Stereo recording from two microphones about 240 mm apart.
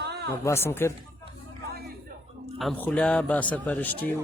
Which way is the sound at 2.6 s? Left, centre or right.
Centre.